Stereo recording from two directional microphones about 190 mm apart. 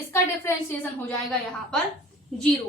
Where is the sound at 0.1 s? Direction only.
10° left (ahead or behind).